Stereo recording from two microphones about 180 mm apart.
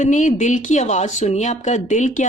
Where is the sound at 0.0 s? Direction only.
45° left (ahead or behind).